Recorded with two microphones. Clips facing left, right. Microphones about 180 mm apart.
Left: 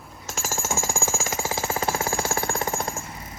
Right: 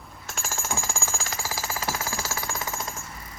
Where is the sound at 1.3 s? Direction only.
20° left (ahead or behind).